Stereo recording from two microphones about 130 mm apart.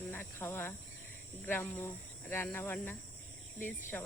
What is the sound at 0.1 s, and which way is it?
Cricket, 15° left (ahead or behind).